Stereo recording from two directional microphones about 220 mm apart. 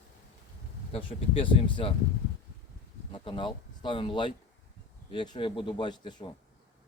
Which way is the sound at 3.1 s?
25° left (ahead or behind).